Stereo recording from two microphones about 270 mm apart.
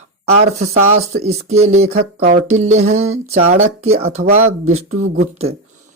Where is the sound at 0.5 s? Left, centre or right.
Right.